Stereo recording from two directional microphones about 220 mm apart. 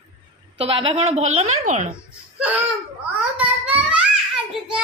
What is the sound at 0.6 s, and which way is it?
A woman's voice, 25° right (ahead or behind).